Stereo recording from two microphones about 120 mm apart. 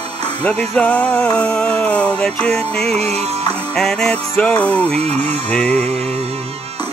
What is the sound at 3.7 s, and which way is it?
Music, 5° left (ahead or behind).